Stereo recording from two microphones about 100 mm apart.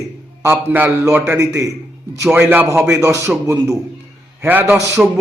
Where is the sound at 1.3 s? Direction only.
30° right (ahead or behind).